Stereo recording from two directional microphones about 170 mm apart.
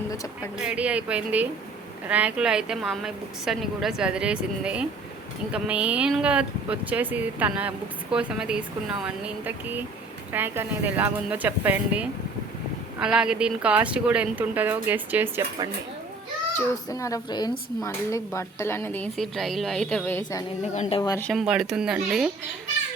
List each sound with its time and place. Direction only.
0.6 s a woman's voice: 5° right (ahead or behind)
16.6 s speech: 20° left (ahead or behind)
19.1 s a woman's voice: centre (ahead or behind)
21.4 s a woman's voice: 5° right (ahead or behind)